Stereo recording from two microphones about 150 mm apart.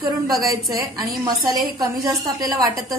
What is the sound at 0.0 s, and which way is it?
Speech, 25° right (ahead or behind).